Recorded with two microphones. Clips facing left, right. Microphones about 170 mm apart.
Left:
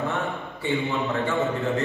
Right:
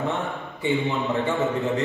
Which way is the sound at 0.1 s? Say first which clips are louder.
Even; 20° right (ahead or behind).